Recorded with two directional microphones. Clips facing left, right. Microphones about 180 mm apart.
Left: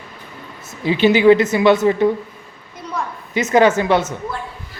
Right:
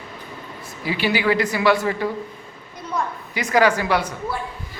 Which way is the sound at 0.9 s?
20° left (ahead or behind).